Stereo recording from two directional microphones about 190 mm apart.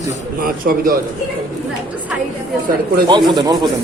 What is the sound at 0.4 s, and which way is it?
Speech, 50° right (ahead or behind).